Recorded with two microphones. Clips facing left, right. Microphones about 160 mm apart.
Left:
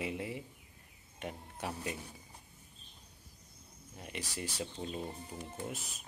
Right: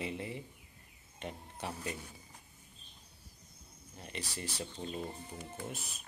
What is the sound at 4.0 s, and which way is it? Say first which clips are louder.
Speech: left 1 dB; 10° left (ahead or behind).